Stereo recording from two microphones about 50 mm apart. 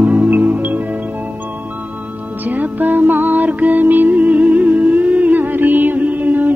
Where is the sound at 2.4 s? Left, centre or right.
Right.